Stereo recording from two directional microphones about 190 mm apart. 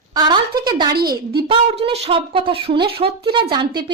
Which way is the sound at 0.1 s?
20° right (ahead or behind).